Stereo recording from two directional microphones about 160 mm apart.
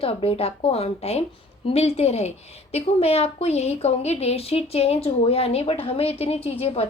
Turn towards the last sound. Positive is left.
turn(degrees=40)  # may be behind; listen again after turning